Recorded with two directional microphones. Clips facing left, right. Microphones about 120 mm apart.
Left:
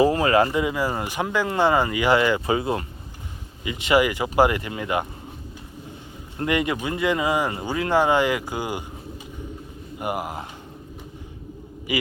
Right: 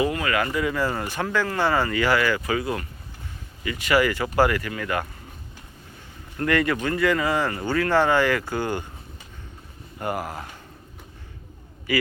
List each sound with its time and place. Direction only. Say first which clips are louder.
0.0 s speech: left 6 dB; 30° left (ahead or behind)
0.6 s speech: even; 15° left (ahead or behind)
6.3 s speech: right 1 dB; 20° left (ahead or behind)
10.0 s speech: left 1 dB; 15° left (ahead or behind)
11.9 s speech: right 2 dB; 20° left (ahead or behind)